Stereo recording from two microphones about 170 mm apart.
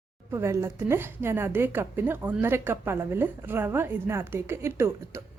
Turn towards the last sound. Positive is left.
turn(degrees=-15)  # may be behind; listen again after turning